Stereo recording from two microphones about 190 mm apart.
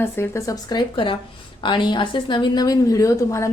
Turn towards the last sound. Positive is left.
turn(degrees=15)  # may be behind; listen again after turning